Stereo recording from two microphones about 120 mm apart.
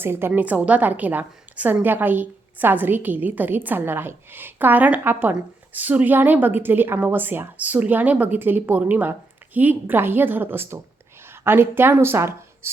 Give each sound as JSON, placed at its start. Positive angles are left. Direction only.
{"t": 0.0, "sound": "a woman's voice", "side_deg": -20}